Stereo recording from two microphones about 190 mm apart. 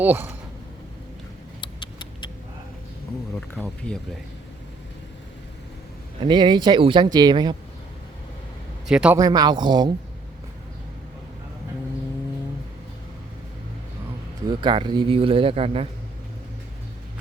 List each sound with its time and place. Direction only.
0.0 s speech: 10° right (ahead or behind)
1.6 s a sound: 25° left (ahead or behind)
3.3 s speech: 5° left (ahead or behind)
6.2 s speech: 25° right (ahead or behind)
8.9 s speech: 5° right (ahead or behind)
9.1 s speech: 20° right (ahead or behind)
14.4 s speech: 25° right (ahead or behind)